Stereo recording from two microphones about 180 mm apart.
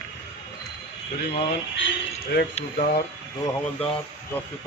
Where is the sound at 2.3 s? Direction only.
75° left (ahead or behind).